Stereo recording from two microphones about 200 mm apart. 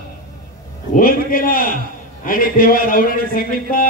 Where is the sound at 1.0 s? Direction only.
45° left (ahead or behind).